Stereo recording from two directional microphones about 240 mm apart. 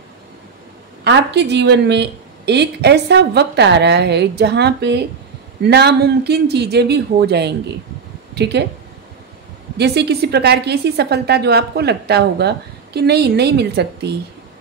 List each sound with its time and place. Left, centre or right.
1.0 s a woman's voice: right
9.8 s a woman's voice: right